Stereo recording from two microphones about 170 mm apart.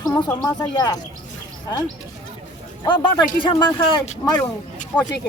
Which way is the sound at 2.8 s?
25° left (ahead or behind).